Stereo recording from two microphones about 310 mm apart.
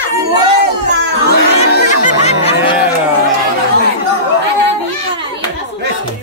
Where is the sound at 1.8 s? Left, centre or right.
Left.